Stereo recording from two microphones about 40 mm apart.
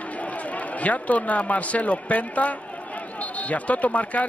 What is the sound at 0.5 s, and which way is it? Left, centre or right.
Speech, left.